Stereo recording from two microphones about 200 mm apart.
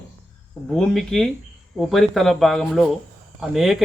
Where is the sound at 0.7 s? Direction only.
Centre (ahead or behind).